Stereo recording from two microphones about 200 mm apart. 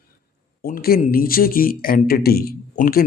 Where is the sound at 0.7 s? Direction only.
45° left (ahead or behind).